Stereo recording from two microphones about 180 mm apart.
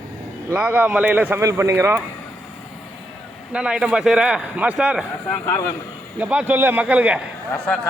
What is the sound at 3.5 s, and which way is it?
A man's voice, 5° right (ahead or behind).